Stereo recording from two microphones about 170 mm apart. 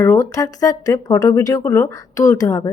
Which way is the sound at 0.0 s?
15° left (ahead or behind).